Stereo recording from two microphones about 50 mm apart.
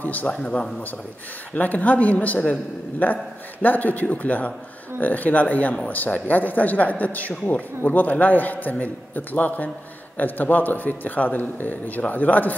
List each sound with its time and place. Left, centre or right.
0.0 s a man's voice: left
0.3 s speech: left
1.5 s a man's voice: left